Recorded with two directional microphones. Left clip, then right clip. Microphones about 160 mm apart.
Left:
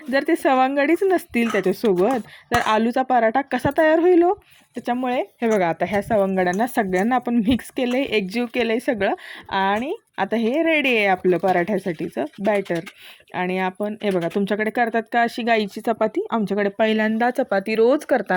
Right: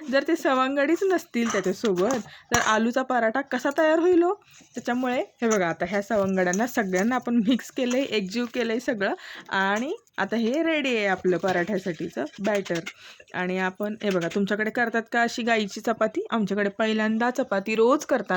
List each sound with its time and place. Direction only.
0.1 s speech: 15° left (ahead or behind)